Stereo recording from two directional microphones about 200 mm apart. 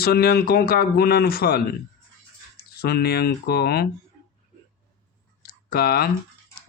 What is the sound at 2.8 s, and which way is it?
A man's voice, 50° left (ahead or behind).